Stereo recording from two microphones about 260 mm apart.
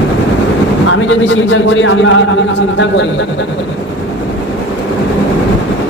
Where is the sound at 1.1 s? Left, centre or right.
Left.